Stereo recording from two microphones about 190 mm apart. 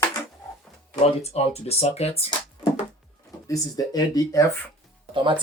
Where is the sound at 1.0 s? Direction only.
35° left (ahead or behind).